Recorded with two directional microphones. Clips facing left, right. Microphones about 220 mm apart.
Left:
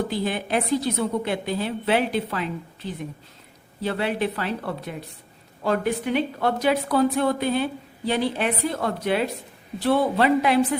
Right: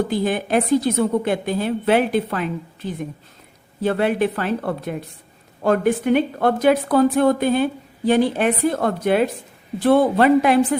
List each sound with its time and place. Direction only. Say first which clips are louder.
0.1 s speech: right 5 dB; 50° right (ahead or behind)